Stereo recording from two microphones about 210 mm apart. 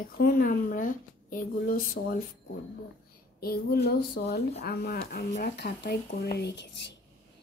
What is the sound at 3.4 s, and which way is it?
Speech, 45° left (ahead or behind).